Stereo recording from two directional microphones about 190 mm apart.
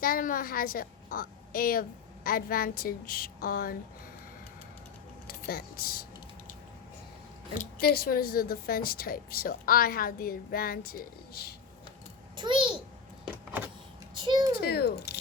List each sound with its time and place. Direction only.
0.0 s speech: 50° left (ahead or behind)
5.3 s speech: 50° left (ahead or behind)
7.6 s speech: 55° left (ahead or behind)
12.4 s a child's voice: 25° right (ahead or behind)
14.3 s a child's voice: 25° right (ahead or behind)
14.6 s a child's voice: 55° left (ahead or behind)